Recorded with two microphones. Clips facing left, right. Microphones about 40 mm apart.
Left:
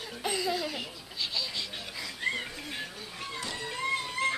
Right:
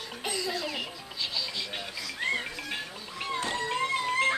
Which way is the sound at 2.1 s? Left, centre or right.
Right.